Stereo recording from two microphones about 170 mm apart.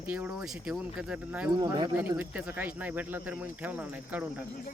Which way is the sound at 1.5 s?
25° right (ahead or behind).